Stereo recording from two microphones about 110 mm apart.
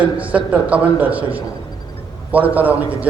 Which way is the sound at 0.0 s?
15° right (ahead or behind).